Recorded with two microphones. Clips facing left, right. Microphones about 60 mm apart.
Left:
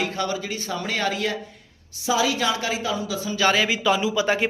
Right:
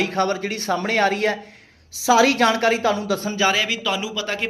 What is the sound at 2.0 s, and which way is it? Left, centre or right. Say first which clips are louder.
A woman's voice: right 6 dB; right.